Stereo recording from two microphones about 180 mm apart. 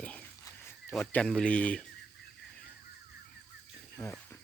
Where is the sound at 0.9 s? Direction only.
5° left (ahead or behind).